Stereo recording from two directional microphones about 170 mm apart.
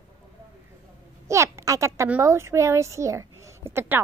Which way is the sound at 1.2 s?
15° right (ahead or behind).